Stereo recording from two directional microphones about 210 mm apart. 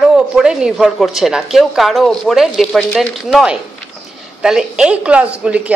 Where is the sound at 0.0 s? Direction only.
5° right (ahead or behind).